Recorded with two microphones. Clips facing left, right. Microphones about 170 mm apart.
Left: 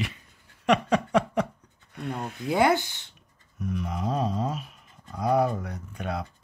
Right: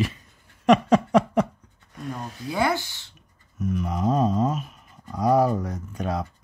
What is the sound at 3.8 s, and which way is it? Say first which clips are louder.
Speech: right 6 dB; 45° right (ahead or behind).